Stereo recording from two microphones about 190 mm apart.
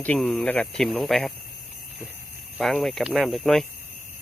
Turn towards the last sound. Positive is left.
turn(degrees=0)  # may be behind; listen again after turning